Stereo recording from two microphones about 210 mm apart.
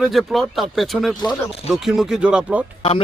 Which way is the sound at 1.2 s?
25° left (ahead or behind).